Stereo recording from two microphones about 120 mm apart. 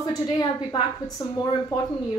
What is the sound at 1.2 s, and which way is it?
Speech, 35° left (ahead or behind).